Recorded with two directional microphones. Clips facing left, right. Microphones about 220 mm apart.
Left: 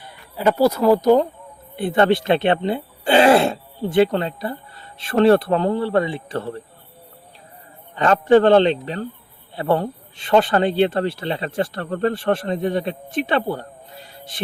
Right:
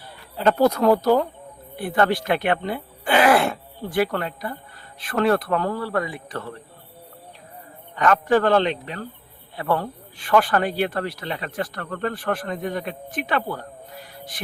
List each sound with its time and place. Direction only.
0.3 s speech: 10° left (ahead or behind)
1.0 s speech: 20° left (ahead or behind)
7.9 s speech: 30° left (ahead or behind)